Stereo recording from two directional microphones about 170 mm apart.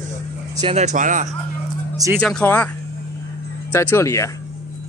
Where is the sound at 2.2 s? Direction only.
5° left (ahead or behind).